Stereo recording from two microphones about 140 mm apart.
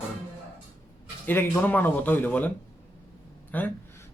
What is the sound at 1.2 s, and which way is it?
A man's voice, 15° left (ahead or behind).